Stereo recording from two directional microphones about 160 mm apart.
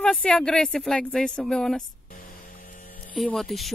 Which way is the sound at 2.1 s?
60° left (ahead or behind).